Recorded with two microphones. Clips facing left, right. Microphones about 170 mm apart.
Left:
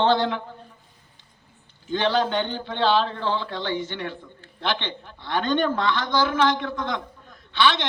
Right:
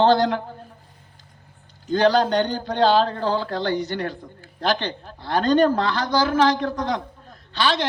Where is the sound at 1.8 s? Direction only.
40° right (ahead or behind).